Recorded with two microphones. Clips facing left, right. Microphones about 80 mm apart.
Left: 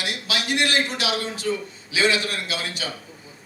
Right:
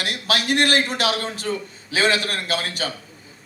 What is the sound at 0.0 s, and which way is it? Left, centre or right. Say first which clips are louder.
A man's voice: right 4 dB; right.